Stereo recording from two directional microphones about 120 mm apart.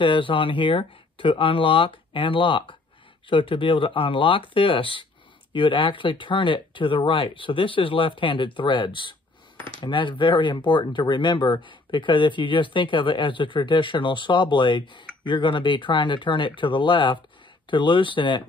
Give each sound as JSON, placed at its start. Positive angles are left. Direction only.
{"t": 0.0, "sound": "speech", "side_deg": 45}